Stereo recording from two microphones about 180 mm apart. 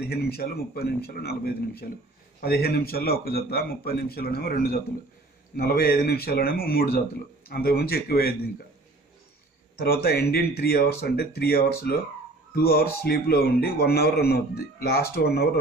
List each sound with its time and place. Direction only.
0.0 s a man's voice: 60° left (ahead or behind)
9.8 s a man's voice: 60° left (ahead or behind)